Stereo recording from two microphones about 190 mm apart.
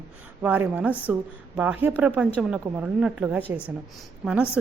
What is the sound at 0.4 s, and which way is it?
A woman's voice, 10° right (ahead or behind).